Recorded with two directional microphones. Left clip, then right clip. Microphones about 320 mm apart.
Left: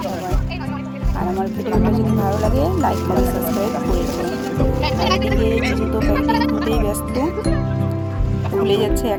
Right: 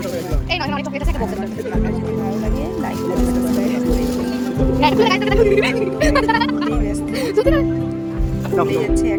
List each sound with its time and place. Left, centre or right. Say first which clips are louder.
4.8 s speech: right 6 dB; centre